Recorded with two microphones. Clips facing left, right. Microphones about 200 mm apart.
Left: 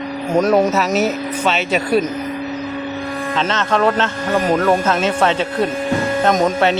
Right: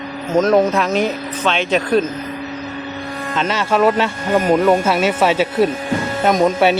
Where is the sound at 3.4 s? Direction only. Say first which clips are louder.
Right 2 dB; 10° right (ahead or behind).